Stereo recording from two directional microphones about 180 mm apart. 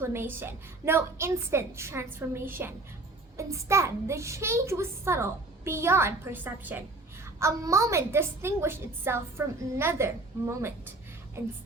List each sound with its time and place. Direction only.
0.0 s a child's voice: 15° right (ahead or behind)